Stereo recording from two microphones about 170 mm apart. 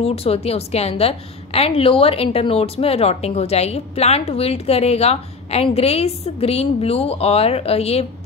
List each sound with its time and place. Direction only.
0.0 s a woman's voice: 35° left (ahead or behind)